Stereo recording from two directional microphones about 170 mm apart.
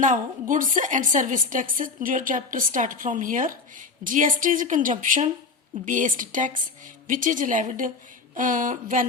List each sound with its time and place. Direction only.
0.0 s a woman's voice: 50° right (ahead or behind)